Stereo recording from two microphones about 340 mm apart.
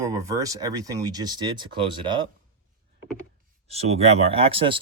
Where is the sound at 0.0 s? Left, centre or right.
Centre.